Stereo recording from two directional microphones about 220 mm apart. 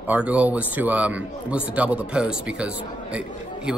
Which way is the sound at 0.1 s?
5° right (ahead or behind).